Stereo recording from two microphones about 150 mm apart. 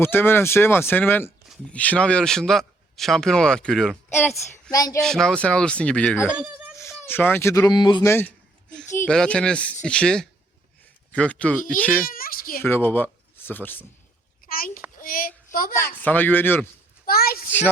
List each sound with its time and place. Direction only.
0.0 s speech: 15° left (ahead or behind)
4.1 s a woman's voice: 15° left (ahead or behind)
4.9 s speech: 5° left (ahead or behind)
6.3 s speech: 10° right (ahead or behind)
6.7 s speech: 15° left (ahead or behind)
8.0 s speech: 15° left (ahead or behind)
12.0 s a child's voice: 75° left (ahead or behind)
12.6 s speech: 15° left (ahead or behind)
14.4 s a child's voice: 70° left (ahead or behind)
16.0 s speech: 10° left (ahead or behind)
17.1 s a sound: 90° left